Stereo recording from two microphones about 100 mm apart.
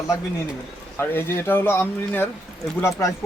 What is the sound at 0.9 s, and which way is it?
Speech, 25° left (ahead or behind).